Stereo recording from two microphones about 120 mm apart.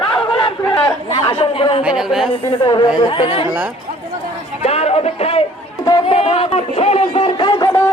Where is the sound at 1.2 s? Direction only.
45° left (ahead or behind).